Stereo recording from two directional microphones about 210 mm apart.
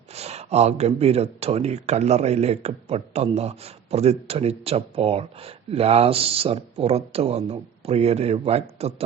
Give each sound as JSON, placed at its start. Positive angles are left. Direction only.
{"t": 0.1, "sound": "speech", "side_deg": -30}